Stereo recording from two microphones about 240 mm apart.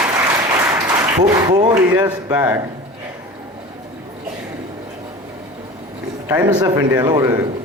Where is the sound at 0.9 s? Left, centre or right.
Centre.